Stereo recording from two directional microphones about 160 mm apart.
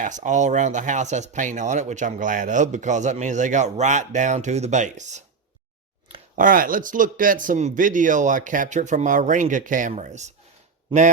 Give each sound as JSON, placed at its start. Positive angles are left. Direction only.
{"t": 0.0, "sound": "speech", "side_deg": -50}
{"t": 6.3, "sound": "speech", "side_deg": -60}